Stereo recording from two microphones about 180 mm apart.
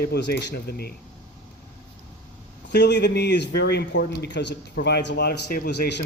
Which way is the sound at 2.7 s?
65° left (ahead or behind).